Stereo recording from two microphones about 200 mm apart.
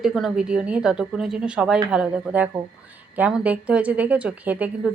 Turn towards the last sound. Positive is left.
turn(degrees=-5)  # may be behind; listen again after turning